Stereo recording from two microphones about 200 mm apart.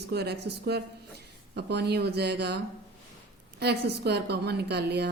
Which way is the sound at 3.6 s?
55° right (ahead or behind).